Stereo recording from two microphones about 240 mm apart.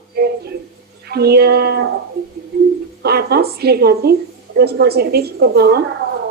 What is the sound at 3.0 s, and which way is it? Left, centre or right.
Speech, right.